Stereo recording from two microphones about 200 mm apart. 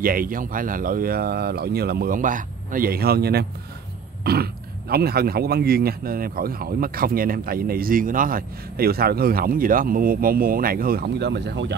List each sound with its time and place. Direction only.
0.0 s speech: 45° right (ahead or behind)